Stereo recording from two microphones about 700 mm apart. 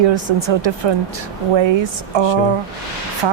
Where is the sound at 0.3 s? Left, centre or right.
Right.